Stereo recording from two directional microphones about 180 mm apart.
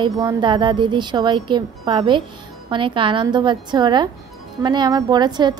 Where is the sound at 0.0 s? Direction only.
25° right (ahead or behind).